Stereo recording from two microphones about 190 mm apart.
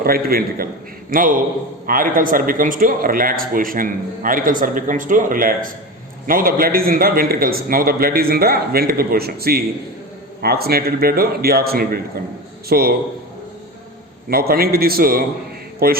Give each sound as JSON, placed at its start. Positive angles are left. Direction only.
{"t": 0.0, "sound": "a man's voice", "side_deg": -50}
{"t": 14.3, "sound": "a man's voice", "side_deg": -50}